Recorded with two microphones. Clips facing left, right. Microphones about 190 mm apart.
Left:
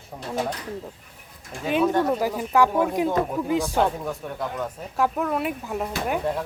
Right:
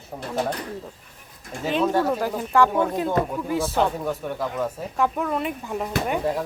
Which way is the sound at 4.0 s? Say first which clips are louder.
Right 3 dB; centre (ahead or behind).